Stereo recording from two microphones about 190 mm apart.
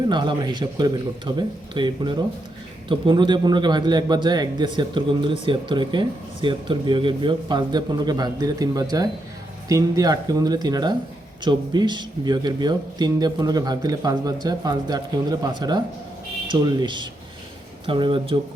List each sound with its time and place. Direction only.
0.1 s a man's voice: 25° right (ahead or behind)